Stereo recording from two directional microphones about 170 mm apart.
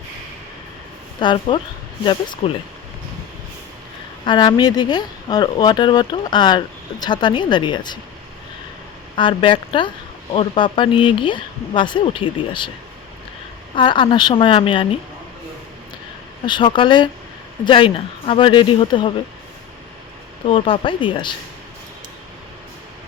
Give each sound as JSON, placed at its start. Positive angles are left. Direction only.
{"t": 1.2, "sound": "speech", "side_deg": 30}
{"t": 4.3, "sound": "speech", "side_deg": 25}
{"t": 9.1, "sound": "speech", "side_deg": 30}
{"t": 13.7, "sound": "speech", "side_deg": 30}
{"t": 16.5, "sound": "speech", "side_deg": 30}
{"t": 20.5, "sound": "speech", "side_deg": 30}